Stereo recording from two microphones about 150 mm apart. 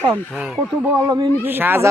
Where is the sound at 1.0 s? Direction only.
25° right (ahead or behind).